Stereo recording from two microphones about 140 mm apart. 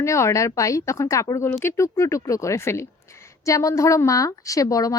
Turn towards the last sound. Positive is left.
turn(degrees=25)  # may be behind; listen again after turning